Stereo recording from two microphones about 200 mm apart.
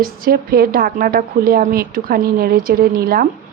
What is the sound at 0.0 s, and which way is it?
A woman's voice, 45° right (ahead or behind).